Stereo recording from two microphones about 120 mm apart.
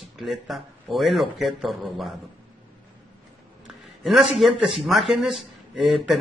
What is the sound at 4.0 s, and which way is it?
A man's voice, centre (ahead or behind).